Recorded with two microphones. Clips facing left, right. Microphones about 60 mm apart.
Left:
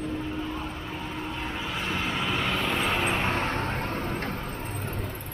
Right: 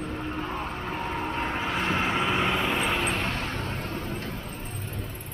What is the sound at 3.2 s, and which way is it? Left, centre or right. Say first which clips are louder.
Vehicle: left 4 dB; left.